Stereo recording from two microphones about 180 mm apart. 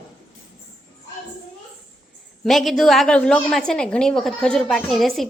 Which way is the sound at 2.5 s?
Centre (ahead or behind).